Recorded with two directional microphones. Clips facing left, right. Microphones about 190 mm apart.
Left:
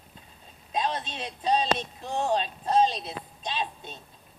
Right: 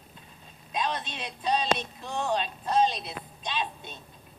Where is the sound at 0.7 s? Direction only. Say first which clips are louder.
Left 2 dB; 35° left (ahead or behind).